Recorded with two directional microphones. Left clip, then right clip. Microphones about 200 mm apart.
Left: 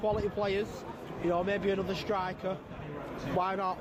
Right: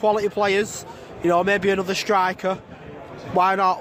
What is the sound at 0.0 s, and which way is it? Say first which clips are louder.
Speech: right 11 dB; 60° right (ahead or behind).